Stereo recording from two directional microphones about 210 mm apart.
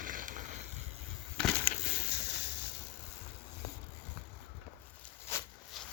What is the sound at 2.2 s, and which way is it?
Boat, 55° left (ahead or behind).